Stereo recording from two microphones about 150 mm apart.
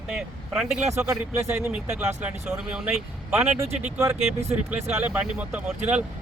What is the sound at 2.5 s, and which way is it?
Speech, 5° right (ahead or behind).